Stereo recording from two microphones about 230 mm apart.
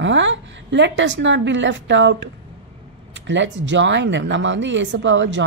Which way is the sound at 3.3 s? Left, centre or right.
Right.